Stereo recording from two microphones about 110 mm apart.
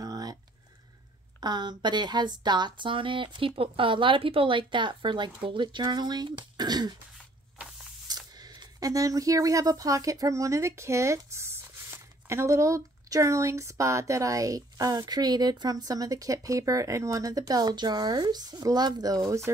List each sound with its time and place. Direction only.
0.0 s a sound: 35° right (ahead or behind)
1.4 s speech: 40° right (ahead or behind)
8.1 s speech: 40° right (ahead or behind)